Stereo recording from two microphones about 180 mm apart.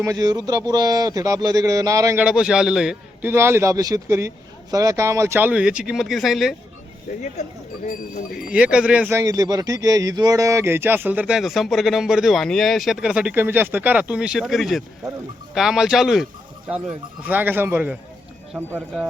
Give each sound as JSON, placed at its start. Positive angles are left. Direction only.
{"t": 0.0, "sound": "speech", "side_deg": -20}
{"t": 2.2, "sound": "a man's voice", "side_deg": -5}
{"t": 7.1, "sound": "speech", "side_deg": 45}
{"t": 8.5, "sound": "a man's voice", "side_deg": -5}
{"t": 17.2, "sound": "a man's voice", "side_deg": -10}